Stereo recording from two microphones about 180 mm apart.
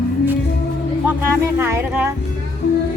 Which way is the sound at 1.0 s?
10° right (ahead or behind).